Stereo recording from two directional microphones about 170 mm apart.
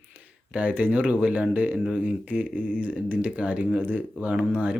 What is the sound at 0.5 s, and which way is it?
Speech, 10° right (ahead or behind).